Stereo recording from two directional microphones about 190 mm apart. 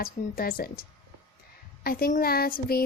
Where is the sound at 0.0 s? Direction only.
50° left (ahead or behind).